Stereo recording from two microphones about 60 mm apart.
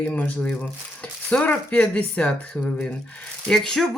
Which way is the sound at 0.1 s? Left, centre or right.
Left.